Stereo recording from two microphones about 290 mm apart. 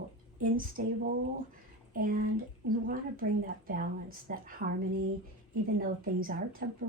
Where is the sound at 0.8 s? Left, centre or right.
Right.